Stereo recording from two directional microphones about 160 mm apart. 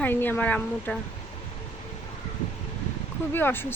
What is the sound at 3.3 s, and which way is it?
Speech, 15° left (ahead or behind).